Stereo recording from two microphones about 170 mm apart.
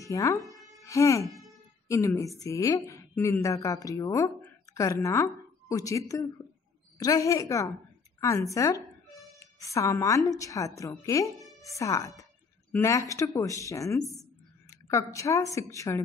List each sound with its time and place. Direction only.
0.0 s speech: 20° left (ahead or behind)
0.5 s music: centre (ahead or behind)
0.8 s a woman's voice: 20° left (ahead or behind)
1.2 s a sound: centre (ahead or behind)
1.9 s a woman's voice: 20° left (ahead or behind)